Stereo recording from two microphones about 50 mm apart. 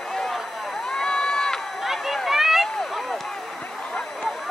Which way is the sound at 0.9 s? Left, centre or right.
Centre.